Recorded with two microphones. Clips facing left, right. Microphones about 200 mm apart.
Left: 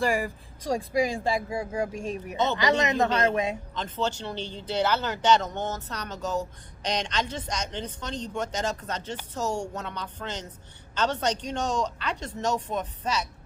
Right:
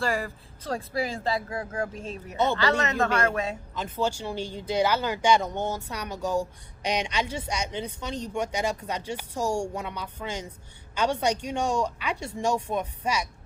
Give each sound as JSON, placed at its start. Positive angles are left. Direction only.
{"t": 0.0, "sound": "speech", "side_deg": 15}
{"t": 3.8, "sound": "speech", "side_deg": -10}